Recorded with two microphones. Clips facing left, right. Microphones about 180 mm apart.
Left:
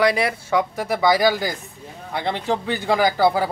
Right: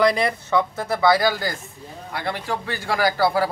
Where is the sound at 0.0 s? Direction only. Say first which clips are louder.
Even; 5° left (ahead or behind).